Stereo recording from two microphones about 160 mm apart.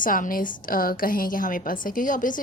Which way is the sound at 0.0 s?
60° left (ahead or behind).